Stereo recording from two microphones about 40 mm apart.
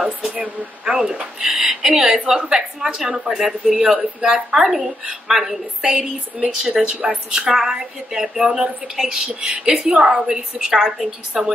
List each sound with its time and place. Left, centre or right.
0.8 s a woman's voice: centre
3.8 s a woman's voice: centre
5.8 s speech: centre
7.3 s a woman's voice: centre
9.3 s a woman's voice: right